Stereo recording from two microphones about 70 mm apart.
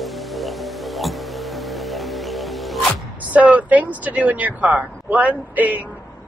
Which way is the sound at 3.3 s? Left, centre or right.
Right.